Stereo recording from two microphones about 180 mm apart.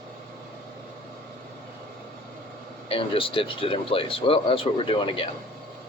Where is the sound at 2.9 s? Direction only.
30° left (ahead or behind).